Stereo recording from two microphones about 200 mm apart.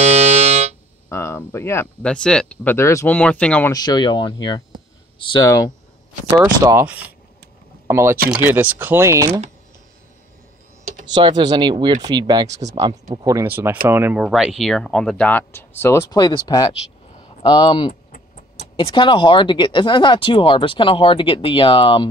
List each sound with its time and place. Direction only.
0.0 s music: 35° right (ahead or behind)
1.0 s speech: 15° left (ahead or behind)
3.7 s speech: 20° left (ahead or behind)
6.3 s speech: 15° right (ahead or behind)
11.1 s speech: 20° right (ahead or behind); by 22.0 s 25° left (ahead or behind)